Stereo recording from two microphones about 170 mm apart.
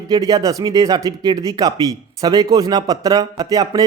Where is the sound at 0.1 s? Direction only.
20° right (ahead or behind).